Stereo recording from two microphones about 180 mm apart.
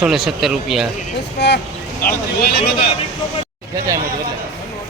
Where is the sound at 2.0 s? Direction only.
55° left (ahead or behind).